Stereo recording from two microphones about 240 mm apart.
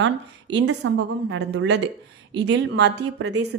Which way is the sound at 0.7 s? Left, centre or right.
Right.